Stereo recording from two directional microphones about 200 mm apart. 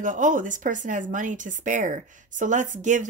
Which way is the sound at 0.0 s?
40° right (ahead or behind).